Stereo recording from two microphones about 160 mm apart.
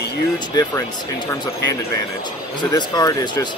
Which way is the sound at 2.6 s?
25° left (ahead or behind).